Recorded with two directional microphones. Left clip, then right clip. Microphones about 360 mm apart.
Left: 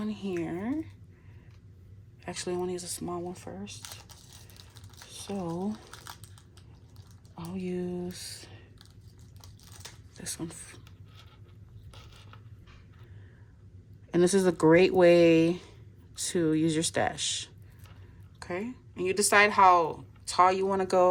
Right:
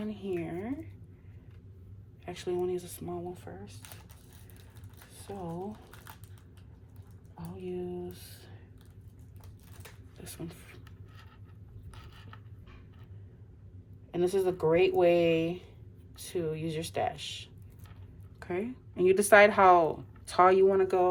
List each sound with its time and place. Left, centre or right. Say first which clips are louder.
0.0 s a sound: left 2 dB; centre
2.2 s speech: even; centre
5.3 s speech: left 4 dB; centre
7.5 s speech: left 3 dB; left
9.4 s typing: left 5 dB; centre
14.1 s speech: left 4 dB; centre
18.3 s speech: even; centre